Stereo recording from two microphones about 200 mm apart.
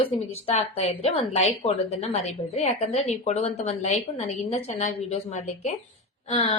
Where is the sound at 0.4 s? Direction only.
30° left (ahead or behind).